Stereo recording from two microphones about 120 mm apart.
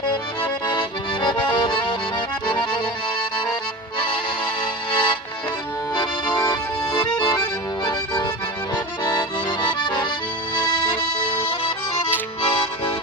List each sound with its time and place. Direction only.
0.7 s accordion: 40° left (ahead or behind)
4.9 s music: 45° left (ahead or behind)
6.4 s accordion: 40° left (ahead or behind)
9.6 s accordion: 40° left (ahead or behind)
11.3 s music: 50° left (ahead or behind)